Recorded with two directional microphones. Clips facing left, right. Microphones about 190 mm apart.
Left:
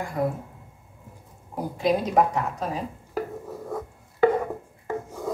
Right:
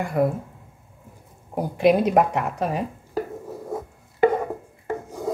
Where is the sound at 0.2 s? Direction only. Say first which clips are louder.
Right 5 dB; 65° right (ahead or behind).